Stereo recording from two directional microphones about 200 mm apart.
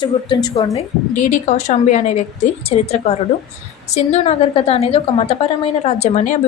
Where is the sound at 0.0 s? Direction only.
25° left (ahead or behind).